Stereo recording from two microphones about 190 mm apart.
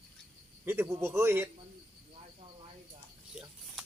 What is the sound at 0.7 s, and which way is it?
Speech, 10° right (ahead or behind).